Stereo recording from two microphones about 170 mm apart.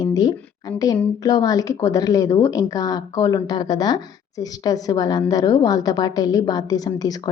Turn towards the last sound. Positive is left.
turn(degrees=20)  # may be behind; listen again after turning